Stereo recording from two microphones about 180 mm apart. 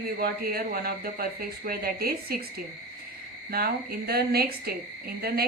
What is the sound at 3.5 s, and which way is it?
A woman's voice, 55° right (ahead or behind).